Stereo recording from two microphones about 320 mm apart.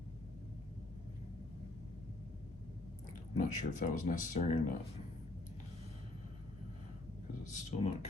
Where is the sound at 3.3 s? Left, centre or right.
Left.